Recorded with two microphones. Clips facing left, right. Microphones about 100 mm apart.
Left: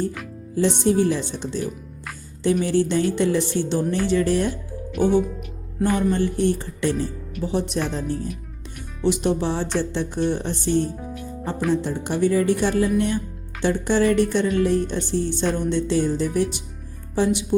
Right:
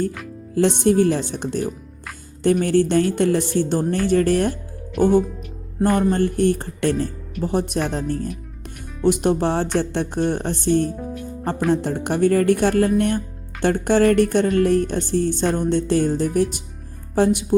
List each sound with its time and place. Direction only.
0.8 s speech: 55° right (ahead or behind)